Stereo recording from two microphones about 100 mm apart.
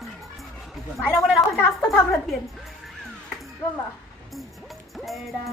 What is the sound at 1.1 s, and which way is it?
Speech, centre (ahead or behind).